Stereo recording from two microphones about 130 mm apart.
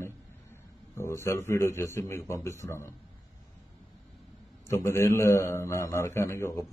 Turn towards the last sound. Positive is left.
turn(degrees=20)  # may be behind; listen again after turning